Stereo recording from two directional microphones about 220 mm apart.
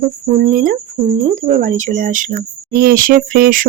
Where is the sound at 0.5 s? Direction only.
40° right (ahead or behind).